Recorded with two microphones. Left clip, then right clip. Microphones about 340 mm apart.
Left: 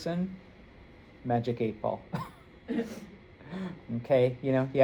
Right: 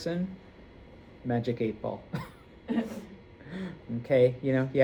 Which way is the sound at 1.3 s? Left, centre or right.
Centre.